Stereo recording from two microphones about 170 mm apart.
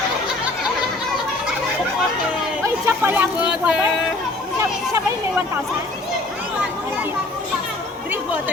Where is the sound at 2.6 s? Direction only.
15° right (ahead or behind).